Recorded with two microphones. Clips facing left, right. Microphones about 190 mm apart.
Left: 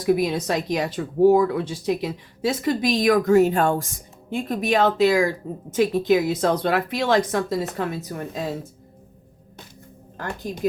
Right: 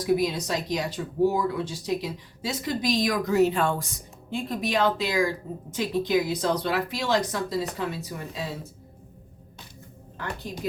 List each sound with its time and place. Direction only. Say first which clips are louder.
0.0 s speech: left 3 dB; 55° left (ahead or behind)
10.2 s speech: left 5 dB; 45° left (ahead or behind)